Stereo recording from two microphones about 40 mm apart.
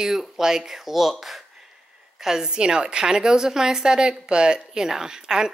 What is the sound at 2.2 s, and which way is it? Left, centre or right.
A woman's voice, centre.